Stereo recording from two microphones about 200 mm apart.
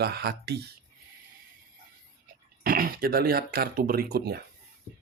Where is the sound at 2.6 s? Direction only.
45° right (ahead or behind).